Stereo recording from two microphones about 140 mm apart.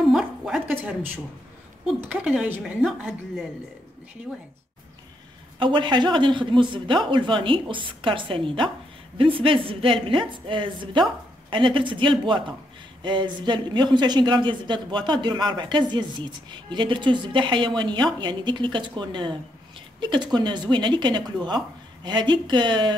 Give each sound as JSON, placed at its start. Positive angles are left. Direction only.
{"t": 0.1, "sound": "a sound", "side_deg": -5}
{"t": 2.0, "sound": "a woman's voice", "side_deg": -10}
{"t": 5.6, "sound": "speech", "side_deg": -35}